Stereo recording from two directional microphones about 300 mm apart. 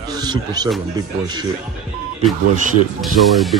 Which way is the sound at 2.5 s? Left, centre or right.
Right.